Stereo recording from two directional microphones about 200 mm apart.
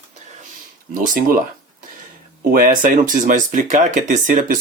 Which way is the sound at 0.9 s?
45° right (ahead or behind).